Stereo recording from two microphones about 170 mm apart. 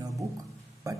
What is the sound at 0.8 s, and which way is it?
Speech, 20° right (ahead or behind).